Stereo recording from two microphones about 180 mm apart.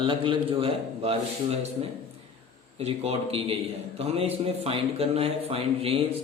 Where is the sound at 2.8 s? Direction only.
35° right (ahead or behind).